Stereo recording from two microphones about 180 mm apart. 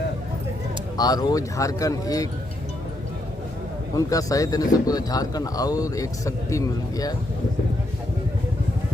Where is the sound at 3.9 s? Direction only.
20° left (ahead or behind).